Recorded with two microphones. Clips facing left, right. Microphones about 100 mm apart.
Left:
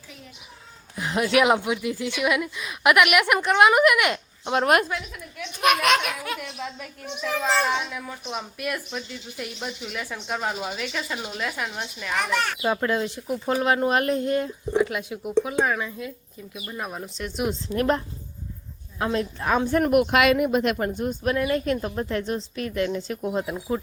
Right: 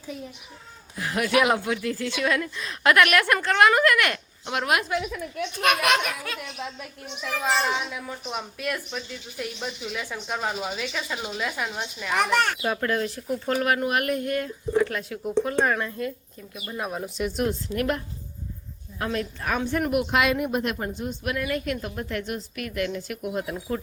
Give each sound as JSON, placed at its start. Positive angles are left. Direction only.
{"t": 0.9, "sound": "a woman's voice", "side_deg": 20}
{"t": 4.6, "sound": "speech", "side_deg": 45}
{"t": 5.6, "sound": "speech", "side_deg": 0}
{"t": 7.4, "sound": "a child's voice", "side_deg": -10}
{"t": 12.6, "sound": "speech", "side_deg": 20}
{"t": 17.5, "sound": "speech", "side_deg": 30}
{"t": 19.7, "sound": "speech", "side_deg": 50}
{"t": 20.1, "sound": "speech", "side_deg": 80}
{"t": 20.9, "sound": "speech", "side_deg": 50}
{"t": 21.2, "sound": "speech", "side_deg": 30}